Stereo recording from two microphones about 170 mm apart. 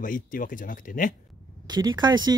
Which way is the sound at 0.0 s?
50° left (ahead or behind).